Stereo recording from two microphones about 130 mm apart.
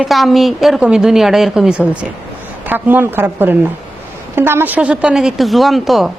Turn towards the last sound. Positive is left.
turn(degrees=0)  # may be behind; listen again after turning